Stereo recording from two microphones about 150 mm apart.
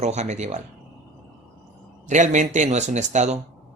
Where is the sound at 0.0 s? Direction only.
50° right (ahead or behind).